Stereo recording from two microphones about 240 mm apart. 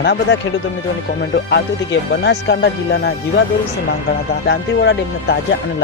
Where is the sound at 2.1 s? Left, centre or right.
Left.